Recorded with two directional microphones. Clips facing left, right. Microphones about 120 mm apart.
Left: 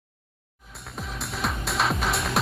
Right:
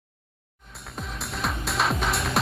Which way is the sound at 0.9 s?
Centre (ahead or behind).